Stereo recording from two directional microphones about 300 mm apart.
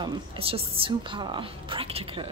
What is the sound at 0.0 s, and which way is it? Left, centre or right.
A woman's voice, centre.